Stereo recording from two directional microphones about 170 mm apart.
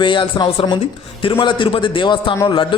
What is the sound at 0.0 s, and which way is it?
A man's voice, 30° left (ahead or behind).